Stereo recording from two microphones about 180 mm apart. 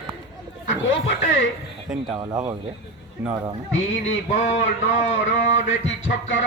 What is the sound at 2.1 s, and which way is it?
Speech, 20° right (ahead or behind).